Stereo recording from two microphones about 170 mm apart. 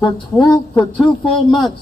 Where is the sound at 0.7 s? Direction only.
5° left (ahead or behind).